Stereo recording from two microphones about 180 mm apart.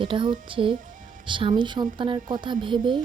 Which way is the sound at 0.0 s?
25° right (ahead or behind).